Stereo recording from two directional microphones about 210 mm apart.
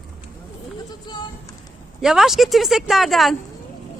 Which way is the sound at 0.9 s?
20° left (ahead or behind).